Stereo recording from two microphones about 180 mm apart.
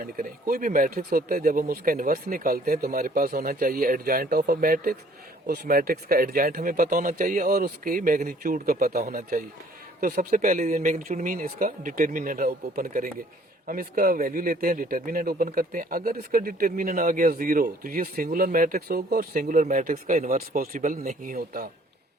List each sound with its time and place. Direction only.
0.0 s speech: 55° right (ahead or behind)